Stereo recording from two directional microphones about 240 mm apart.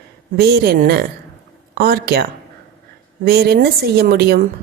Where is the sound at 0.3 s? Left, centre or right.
Right.